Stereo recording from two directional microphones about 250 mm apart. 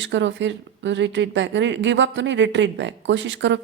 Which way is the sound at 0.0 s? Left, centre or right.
Right.